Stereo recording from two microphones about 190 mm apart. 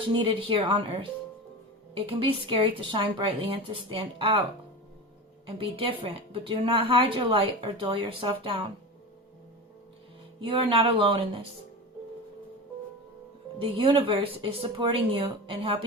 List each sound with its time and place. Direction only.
0.2 s a woman's voice: 30° right (ahead or behind)
5.5 s a woman's voice: 30° right (ahead or behind)
10.4 s a woman's voice: 25° right (ahead or behind)
13.6 s a woman's voice: 30° right (ahead or behind)